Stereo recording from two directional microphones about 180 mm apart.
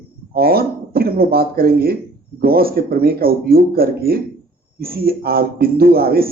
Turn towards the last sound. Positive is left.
turn(degrees=-60)  # may be behind; listen again after turning